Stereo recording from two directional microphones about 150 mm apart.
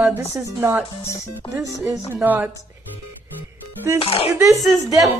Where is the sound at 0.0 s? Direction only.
15° right (ahead or behind).